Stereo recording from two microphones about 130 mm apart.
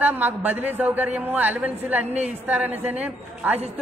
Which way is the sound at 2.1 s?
60° right (ahead or behind).